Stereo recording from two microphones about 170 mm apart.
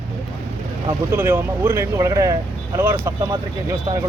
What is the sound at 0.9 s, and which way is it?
Speech, 15° right (ahead or behind).